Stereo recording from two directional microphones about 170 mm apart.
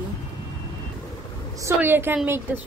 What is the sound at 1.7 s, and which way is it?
Speech, 10° right (ahead or behind).